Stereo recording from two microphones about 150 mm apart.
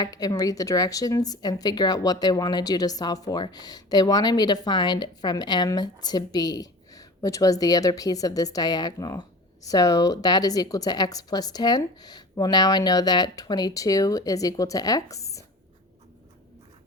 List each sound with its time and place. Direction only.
0.0 s speech: 25° left (ahead or behind)